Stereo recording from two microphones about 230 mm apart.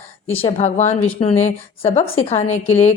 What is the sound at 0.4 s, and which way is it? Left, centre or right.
Speech, left.